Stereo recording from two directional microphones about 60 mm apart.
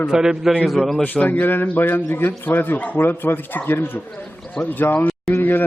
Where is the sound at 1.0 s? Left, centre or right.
Left.